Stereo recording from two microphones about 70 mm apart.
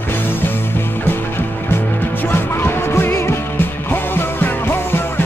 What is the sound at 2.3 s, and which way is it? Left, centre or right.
Music, left.